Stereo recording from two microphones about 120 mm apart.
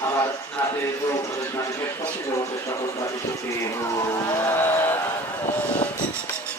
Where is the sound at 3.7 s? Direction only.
25° left (ahead or behind).